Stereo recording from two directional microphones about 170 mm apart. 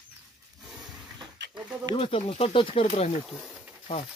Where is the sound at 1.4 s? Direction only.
90° right.